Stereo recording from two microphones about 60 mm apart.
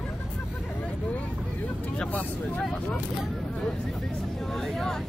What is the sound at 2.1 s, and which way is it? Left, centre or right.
Speech, left.